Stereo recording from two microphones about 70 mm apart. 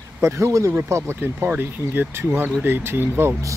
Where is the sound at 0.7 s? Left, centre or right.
Right.